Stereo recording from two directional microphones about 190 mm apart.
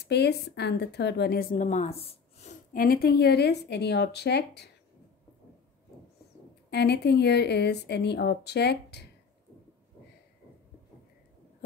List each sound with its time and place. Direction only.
0.0 s a woman's voice: 60° left (ahead or behind); by 2.5 s 35° left (ahead or behind)
2.7 s a woman's voice: 50° left (ahead or behind)
6.7 s a woman's voice: 60° left (ahead or behind)